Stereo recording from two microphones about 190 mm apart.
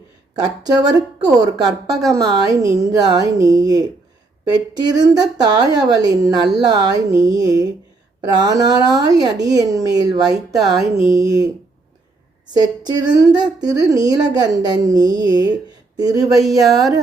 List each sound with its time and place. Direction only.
0.3 s speech: 20° right (ahead or behind)
12.5 s speech: 20° right (ahead or behind)